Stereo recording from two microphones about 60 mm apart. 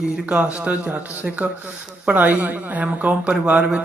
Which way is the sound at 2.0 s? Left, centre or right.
Right.